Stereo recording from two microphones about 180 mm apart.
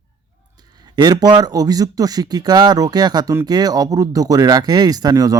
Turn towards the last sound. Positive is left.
turn(degrees=-20)  # may be behind; listen again after turning